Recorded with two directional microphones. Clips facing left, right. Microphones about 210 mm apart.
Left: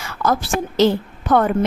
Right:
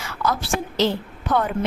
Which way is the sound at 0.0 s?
50° left (ahead or behind).